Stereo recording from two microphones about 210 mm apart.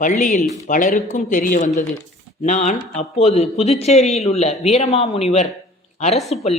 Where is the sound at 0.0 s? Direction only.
40° left (ahead or behind).